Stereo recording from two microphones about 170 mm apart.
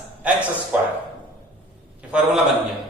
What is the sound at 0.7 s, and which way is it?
Speech, 10° right (ahead or behind).